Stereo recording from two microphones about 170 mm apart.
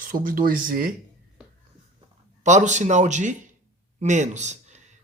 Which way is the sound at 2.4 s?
45° right (ahead or behind).